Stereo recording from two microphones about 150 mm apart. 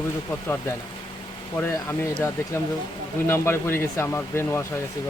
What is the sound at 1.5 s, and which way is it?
Speech, 15° left (ahead or behind).